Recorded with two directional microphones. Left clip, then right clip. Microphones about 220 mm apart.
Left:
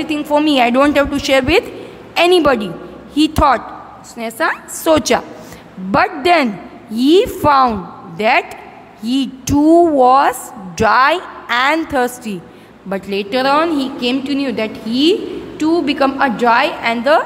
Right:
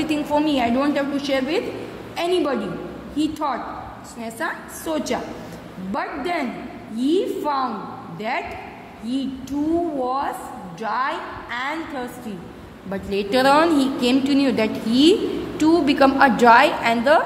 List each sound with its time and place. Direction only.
0.3 s a woman's voice: 25° left (ahead or behind)
12.9 s a woman's voice: 15° left (ahead or behind)